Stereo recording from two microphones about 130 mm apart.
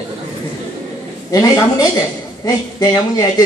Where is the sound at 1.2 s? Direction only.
25° left (ahead or behind).